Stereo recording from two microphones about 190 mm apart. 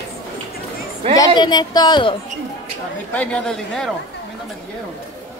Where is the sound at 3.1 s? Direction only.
5° left (ahead or behind).